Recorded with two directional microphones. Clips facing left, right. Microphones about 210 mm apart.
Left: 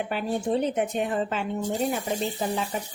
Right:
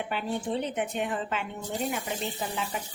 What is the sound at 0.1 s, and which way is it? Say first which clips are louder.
A woman's voice: left 5 dB; 40° left (ahead or behind).